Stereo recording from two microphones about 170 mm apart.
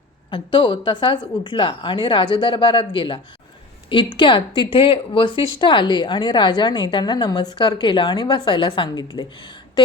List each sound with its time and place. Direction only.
0.3 s speech: 25° left (ahead or behind)